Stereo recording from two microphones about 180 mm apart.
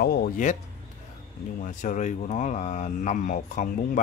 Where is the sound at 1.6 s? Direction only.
45° left (ahead or behind).